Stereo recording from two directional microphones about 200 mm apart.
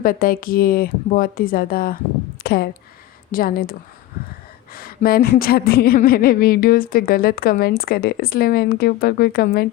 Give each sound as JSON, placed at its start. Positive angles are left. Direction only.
{"t": 0.0, "sound": "a woman's voice", "side_deg": 45}
{"t": 2.4, "sound": "a sound", "side_deg": 50}
{"t": 3.3, "sound": "a woman's voice", "side_deg": 45}